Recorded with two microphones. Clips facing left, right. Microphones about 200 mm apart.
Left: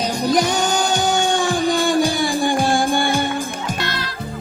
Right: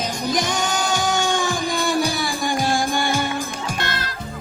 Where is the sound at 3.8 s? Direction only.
50° right (ahead or behind).